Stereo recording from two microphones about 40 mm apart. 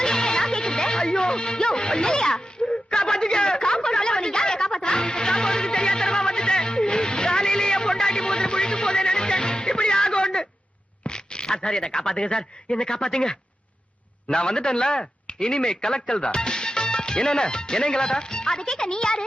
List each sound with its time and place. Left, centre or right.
0.0 s music: centre
2.6 s a sound: left
11.0 s a man's voice: left